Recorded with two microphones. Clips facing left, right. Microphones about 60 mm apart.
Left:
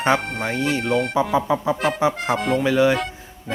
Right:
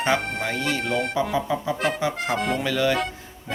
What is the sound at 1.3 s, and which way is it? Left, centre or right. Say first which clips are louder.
Speech: left 5 dB; centre.